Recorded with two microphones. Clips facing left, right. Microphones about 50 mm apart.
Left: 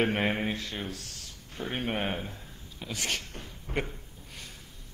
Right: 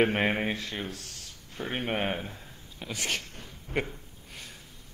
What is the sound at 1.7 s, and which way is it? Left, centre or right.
A man's voice, centre.